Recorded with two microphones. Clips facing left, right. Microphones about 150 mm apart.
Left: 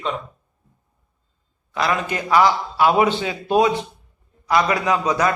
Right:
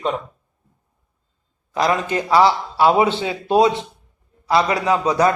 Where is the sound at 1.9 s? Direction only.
30° right (ahead or behind).